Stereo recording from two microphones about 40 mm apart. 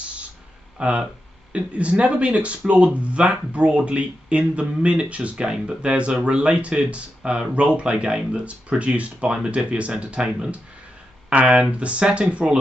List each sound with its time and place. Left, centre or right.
0.7 s speech: right
11.7 s speech: right